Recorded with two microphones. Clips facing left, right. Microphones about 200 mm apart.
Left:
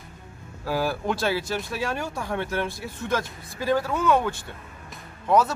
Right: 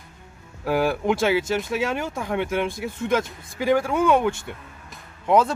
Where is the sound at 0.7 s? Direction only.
20° right (ahead or behind).